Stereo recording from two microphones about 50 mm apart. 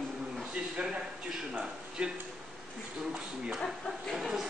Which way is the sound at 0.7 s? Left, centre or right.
Right.